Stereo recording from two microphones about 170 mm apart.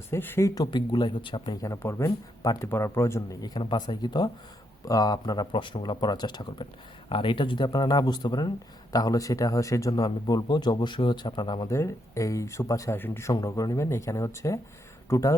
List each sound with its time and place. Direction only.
0.1 s speech: 15° left (ahead or behind); by 1.7 s 30° left (ahead or behind)
1.7 s speech: 15° left (ahead or behind)